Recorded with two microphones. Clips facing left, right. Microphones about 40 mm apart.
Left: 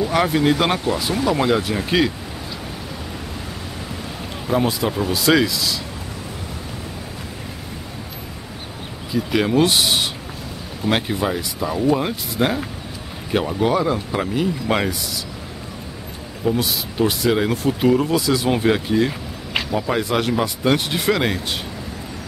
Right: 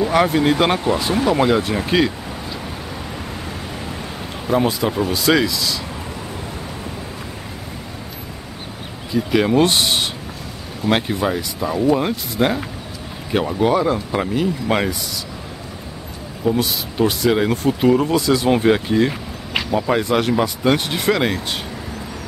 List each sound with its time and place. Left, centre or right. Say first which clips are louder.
0.1 s speech: right 1 dB; centre
0.7 s speech: right 3 dB; right; by 2.1 s centre
4.5 s speech: right 2 dB; centre
9.1 s speech: right 2 dB; centre
16.4 s speech: right 2 dB; centre